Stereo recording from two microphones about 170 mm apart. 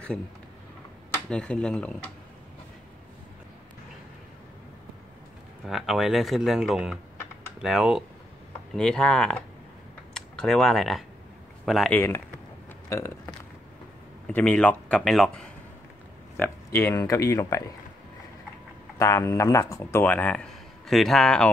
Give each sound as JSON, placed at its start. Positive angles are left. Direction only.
{"t": 1.3, "sound": "speech", "side_deg": 5}
{"t": 5.7, "sound": "speech", "side_deg": 0}
{"t": 11.9, "sound": "speech", "side_deg": 15}
{"t": 14.2, "sound": "speech", "side_deg": 5}
{"t": 16.3, "sound": "speech", "side_deg": 15}
{"t": 18.9, "sound": "speech", "side_deg": 15}